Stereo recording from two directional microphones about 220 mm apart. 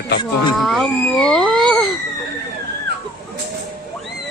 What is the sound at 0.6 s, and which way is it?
A woman's voice, centre (ahead or behind).